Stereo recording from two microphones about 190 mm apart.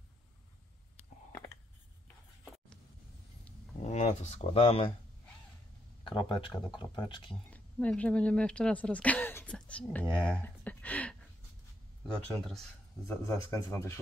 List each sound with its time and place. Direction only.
3.8 s speech: 35° left (ahead or behind)
6.0 s speech: 25° left (ahead or behind)
7.5 s speech: 5° left (ahead or behind)
10.2 s a sound: 5° left (ahead or behind)
12.1 s speech: centre (ahead or behind)
13.1 s speech: 15° left (ahead or behind)